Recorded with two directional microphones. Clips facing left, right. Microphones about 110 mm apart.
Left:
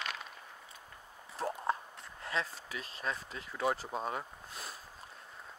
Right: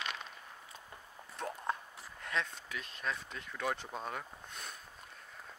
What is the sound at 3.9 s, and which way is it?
Speech, 35° left (ahead or behind).